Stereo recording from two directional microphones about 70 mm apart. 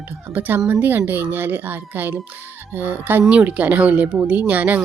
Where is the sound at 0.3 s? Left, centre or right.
Right.